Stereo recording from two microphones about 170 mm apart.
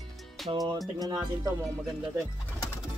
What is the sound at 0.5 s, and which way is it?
Speech, 20° right (ahead or behind).